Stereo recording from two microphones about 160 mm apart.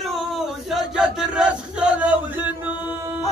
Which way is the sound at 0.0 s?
Centre (ahead or behind).